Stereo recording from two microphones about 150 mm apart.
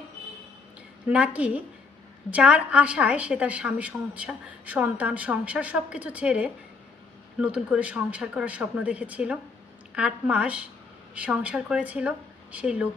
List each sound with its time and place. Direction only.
1.0 s a woman's voice: 10° right (ahead or behind)